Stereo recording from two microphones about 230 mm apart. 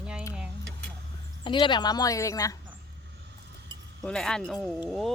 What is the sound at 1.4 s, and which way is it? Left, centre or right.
A woman's voice, left.